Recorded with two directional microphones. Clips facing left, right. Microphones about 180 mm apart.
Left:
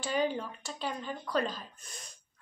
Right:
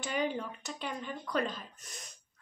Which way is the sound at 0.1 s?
30° left (ahead or behind).